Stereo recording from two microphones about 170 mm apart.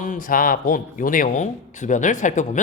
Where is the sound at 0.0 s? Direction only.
50° left (ahead or behind).